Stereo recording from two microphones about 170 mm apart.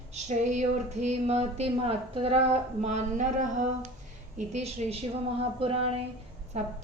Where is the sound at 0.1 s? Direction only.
45° right (ahead or behind).